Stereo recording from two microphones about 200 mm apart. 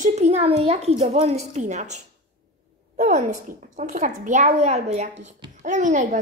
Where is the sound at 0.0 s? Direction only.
35° right (ahead or behind).